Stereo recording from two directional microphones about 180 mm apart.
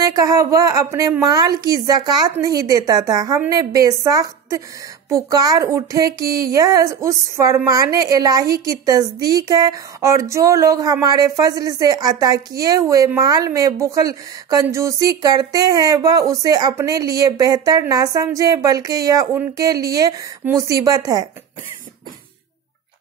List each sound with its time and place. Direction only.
0.0 s speech: 20° right (ahead or behind)